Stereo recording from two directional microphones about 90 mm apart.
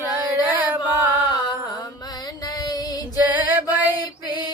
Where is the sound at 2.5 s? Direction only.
45° left (ahead or behind).